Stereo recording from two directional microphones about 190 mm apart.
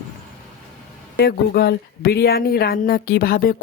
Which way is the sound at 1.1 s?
60° left (ahead or behind).